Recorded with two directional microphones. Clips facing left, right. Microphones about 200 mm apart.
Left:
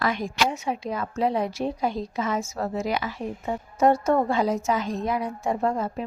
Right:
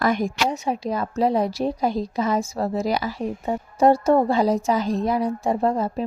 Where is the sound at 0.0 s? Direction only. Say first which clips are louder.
Right 4 dB; 45° right (ahead or behind).